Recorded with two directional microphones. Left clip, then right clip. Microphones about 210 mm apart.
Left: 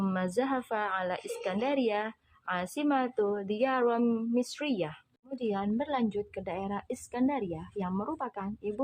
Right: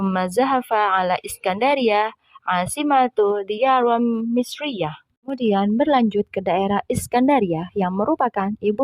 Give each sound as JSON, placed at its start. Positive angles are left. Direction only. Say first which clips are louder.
{"t": 0.0, "sound": "a woman's voice", "louder": "right 11 dB", "side_deg": -45}